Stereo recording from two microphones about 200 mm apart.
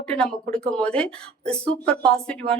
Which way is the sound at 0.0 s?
5° left (ahead or behind).